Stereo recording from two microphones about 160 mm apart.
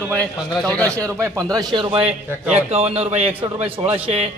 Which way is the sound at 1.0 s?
20° right (ahead or behind).